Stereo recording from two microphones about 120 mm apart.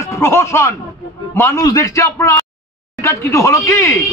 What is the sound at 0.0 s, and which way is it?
A man's voice, 25° left (ahead or behind).